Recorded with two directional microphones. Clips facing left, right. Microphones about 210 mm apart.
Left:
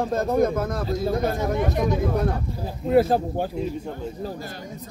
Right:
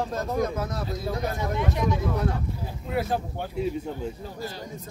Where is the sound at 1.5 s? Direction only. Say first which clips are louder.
Left 4 dB; 45° left (ahead or behind).